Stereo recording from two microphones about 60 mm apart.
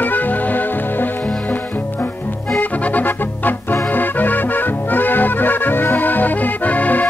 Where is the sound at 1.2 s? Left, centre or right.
Centre.